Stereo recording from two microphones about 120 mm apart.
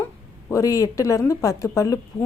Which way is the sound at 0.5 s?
30° left (ahead or behind).